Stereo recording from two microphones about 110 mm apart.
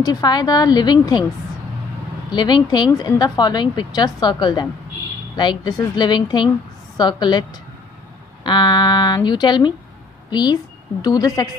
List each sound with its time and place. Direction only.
0.0 s a woman's voice: 35° left (ahead or behind)
2.3 s a woman's voice: 40° left (ahead or behind)